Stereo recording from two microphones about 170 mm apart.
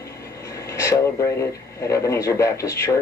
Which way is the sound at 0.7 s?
20° left (ahead or behind).